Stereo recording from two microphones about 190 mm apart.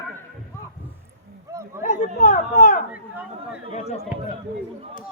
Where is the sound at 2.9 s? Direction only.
5° right (ahead or behind).